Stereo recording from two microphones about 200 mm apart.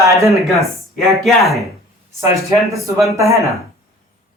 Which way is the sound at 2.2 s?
15° right (ahead or behind).